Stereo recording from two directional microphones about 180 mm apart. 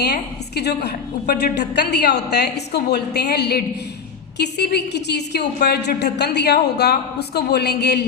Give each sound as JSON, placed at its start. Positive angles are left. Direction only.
{"t": 0.0, "sound": "a woman's voice", "side_deg": 65}